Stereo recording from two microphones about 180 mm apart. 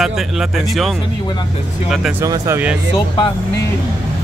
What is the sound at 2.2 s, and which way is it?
Speech, 15° right (ahead or behind).